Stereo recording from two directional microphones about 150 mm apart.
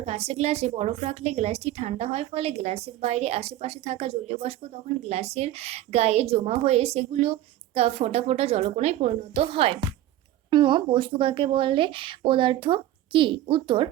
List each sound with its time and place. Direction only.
0.0 s a woman's voice: 45° right (ahead or behind)